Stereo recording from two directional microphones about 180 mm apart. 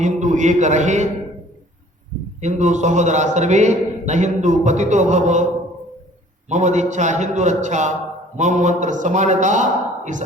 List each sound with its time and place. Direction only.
0.0 s a man's voice: 40° right (ahead or behind)
2.4 s a man's voice: 40° right (ahead or behind)
6.5 s a man's voice: 40° right (ahead or behind)